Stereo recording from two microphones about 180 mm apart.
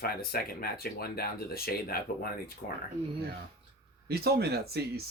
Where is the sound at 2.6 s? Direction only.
45° left (ahead or behind).